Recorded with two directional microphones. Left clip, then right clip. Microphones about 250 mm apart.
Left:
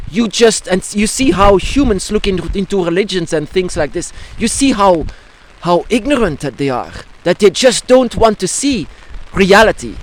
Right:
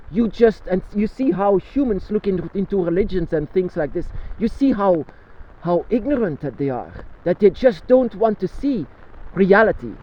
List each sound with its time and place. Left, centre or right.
0.1 s speech: left